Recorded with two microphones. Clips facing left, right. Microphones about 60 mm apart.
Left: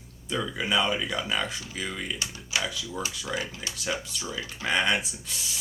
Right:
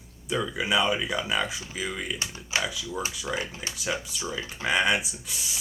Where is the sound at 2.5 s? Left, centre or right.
Right.